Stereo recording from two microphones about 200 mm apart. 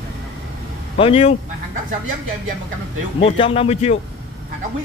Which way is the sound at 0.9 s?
30° left (ahead or behind).